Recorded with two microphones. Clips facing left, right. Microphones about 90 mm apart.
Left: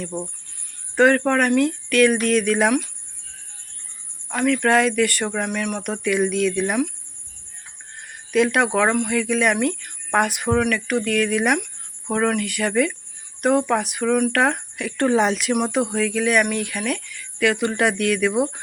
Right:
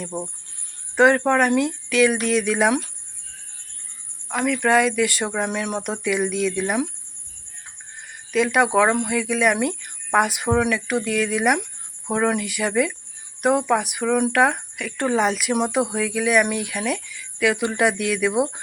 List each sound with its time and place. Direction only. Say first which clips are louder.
0.0 s speech: left 1 dB; 10° right (ahead or behind)
4.3 s speech: left 1 dB; 10° right (ahead or behind)
5.5 s speech: even; 25° right (ahead or behind)
5.9 s speech: left 3 dB; 5° right (ahead or behind)
8.3 s speech: even; centre (ahead or behind); by 14.4 s 20° right (ahead or behind)
14.4 s speech: right 1 dB; 5° right (ahead or behind)
15.5 s speech: even; 15° right (ahead or behind)